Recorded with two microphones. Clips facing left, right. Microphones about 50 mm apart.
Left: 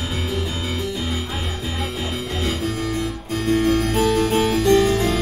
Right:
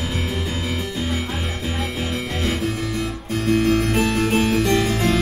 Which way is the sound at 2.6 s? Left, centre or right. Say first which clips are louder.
Even; right.